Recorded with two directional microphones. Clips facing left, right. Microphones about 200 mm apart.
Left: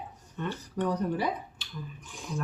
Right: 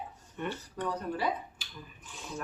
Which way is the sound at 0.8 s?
15° left (ahead or behind).